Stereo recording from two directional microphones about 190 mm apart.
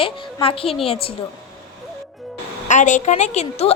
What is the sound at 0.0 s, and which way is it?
Speech, 30° left (ahead or behind).